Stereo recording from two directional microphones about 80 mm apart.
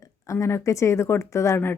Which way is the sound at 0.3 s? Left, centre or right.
Left.